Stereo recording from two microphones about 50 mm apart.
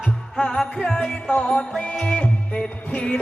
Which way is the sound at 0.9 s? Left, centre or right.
Centre.